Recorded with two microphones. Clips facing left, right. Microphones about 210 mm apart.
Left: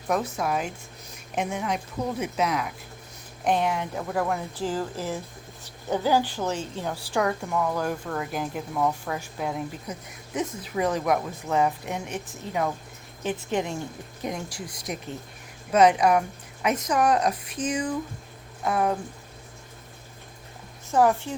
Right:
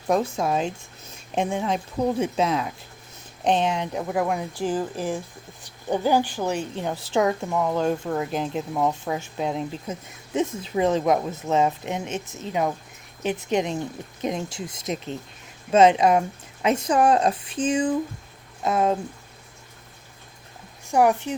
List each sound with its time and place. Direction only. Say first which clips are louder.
0.1 s a woman's voice: right 4 dB; 25° right (ahead or behind)
20.9 s speech: right 2 dB; 15° right (ahead or behind)